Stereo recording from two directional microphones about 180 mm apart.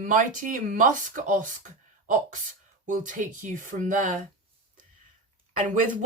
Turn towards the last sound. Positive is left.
turn(degrees=-45)  # may be behind; listen again after turning